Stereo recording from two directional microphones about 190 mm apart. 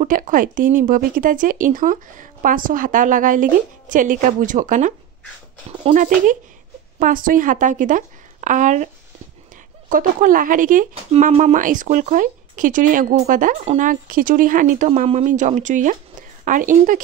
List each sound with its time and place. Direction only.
0.0 s speech: 45° right (ahead or behind)
5.9 s a woman's voice: 45° right (ahead or behind)
9.8 s speech: 45° right (ahead or behind)